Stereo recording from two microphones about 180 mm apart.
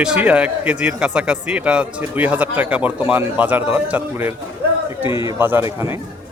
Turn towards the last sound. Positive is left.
turn(degrees=-15)  # may be behind; listen again after turning